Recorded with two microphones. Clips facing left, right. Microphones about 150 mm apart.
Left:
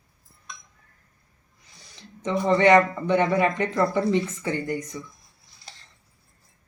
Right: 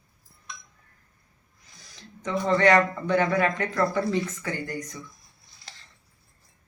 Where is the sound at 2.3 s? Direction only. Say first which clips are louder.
Left 3 dB; 15° left (ahead or behind).